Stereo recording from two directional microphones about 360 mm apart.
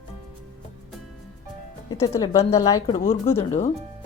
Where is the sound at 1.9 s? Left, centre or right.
Centre.